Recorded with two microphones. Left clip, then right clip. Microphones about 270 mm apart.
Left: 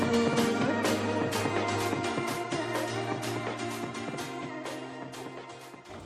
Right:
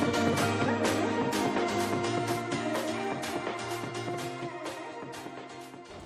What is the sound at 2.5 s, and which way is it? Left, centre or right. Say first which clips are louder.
Music: even; centre.